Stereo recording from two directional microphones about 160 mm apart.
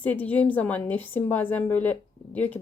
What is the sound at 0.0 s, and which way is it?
Speech, 10° left (ahead or behind).